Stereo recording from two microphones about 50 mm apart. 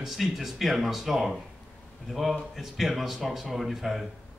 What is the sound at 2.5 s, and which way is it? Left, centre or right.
Speech, centre.